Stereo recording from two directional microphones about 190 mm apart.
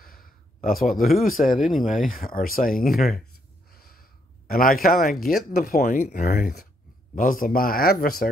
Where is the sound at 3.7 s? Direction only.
55° left (ahead or behind).